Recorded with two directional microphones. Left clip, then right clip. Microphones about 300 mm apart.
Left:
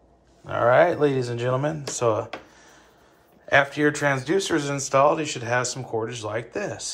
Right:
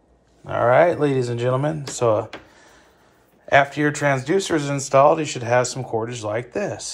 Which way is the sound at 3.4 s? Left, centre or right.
Centre.